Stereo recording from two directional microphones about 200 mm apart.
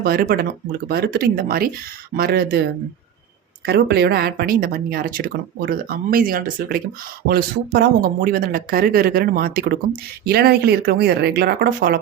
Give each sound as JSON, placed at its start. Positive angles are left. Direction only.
{"t": 0.0, "sound": "speech", "side_deg": -50}
{"t": 3.7, "sound": "speech", "side_deg": -55}